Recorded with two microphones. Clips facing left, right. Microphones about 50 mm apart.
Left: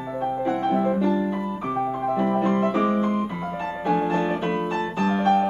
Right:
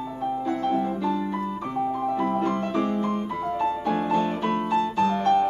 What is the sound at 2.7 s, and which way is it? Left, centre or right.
Piano, left.